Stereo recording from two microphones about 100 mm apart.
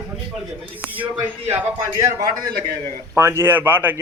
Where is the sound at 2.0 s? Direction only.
35° right (ahead or behind).